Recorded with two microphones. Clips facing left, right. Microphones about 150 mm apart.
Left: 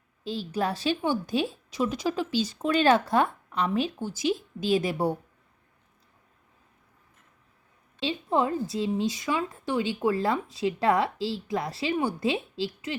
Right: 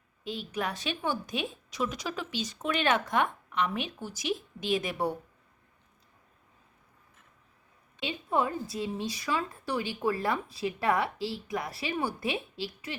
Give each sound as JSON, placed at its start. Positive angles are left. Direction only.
{"t": 0.3, "sound": "a woman's voice", "side_deg": 30}
{"t": 7.9, "sound": "speech", "side_deg": 25}